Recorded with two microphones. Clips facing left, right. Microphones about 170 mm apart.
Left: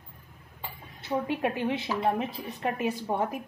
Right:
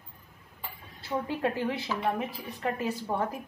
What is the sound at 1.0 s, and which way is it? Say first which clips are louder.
A woman's voice: left 2 dB; 20° left (ahead or behind).